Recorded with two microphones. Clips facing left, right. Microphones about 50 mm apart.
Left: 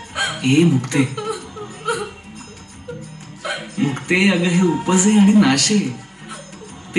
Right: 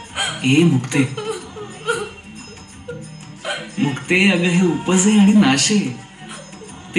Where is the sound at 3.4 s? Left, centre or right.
Right.